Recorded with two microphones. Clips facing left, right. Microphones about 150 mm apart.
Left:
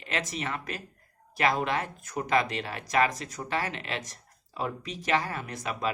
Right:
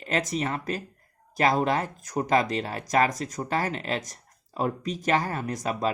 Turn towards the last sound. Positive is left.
turn(degrees=-40)  # may be behind; listen again after turning